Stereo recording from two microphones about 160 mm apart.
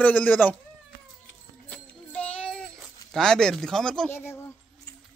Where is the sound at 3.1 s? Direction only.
5° left (ahead or behind).